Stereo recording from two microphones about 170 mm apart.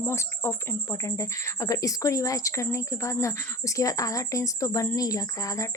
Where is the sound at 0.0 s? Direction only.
15° left (ahead or behind).